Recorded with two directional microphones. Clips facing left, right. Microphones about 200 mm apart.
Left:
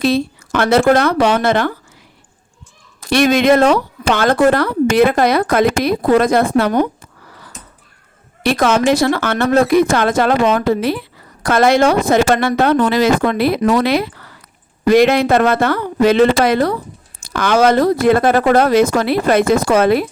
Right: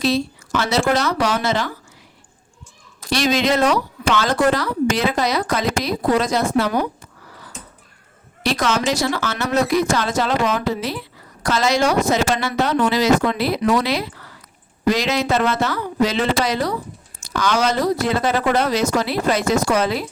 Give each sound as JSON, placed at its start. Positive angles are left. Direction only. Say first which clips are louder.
{"t": 0.0, "sound": "speech", "louder": "left 4 dB", "side_deg": 55}
{"t": 3.0, "sound": "speech", "louder": "left 6 dB", "side_deg": 55}
{"t": 8.4, "sound": "speech", "louder": "left 6 dB", "side_deg": 55}